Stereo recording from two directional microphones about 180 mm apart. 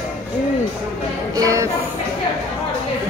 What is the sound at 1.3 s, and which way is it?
Speech, 20° right (ahead or behind).